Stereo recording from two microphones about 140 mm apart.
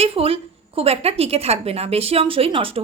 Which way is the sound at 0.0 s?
45° right (ahead or behind).